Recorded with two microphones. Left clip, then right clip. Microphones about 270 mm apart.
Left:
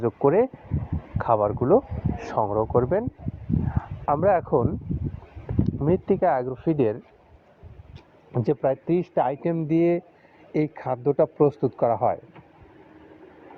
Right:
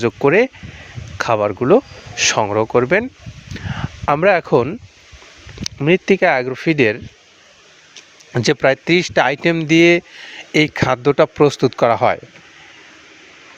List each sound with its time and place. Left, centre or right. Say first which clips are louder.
0.0 s speech: right 7 dB; right
5.8 s speech: right 8 dB; right
8.4 s speech: right 9 dB; right